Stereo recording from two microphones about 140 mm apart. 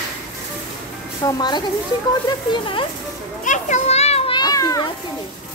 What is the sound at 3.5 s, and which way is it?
Speech, 60° left (ahead or behind).